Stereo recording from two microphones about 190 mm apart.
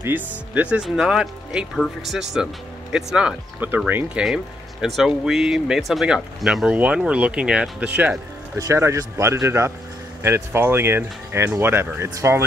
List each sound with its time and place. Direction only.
0.0 s speech: 10° right (ahead or behind)